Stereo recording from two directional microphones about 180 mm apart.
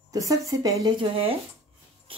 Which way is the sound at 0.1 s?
20° right (ahead or behind).